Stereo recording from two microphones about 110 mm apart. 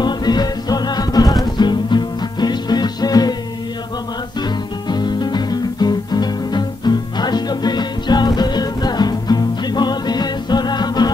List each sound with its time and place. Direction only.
0.0 s music: 40° left (ahead or behind)
4.4 s music: 40° left (ahead or behind)